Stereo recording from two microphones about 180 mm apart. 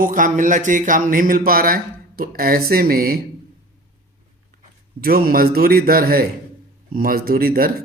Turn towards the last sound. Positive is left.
turn(degrees=-55)  # may be behind; listen again after turning